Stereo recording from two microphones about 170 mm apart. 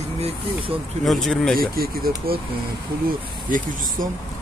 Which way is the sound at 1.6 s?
60° right (ahead or behind).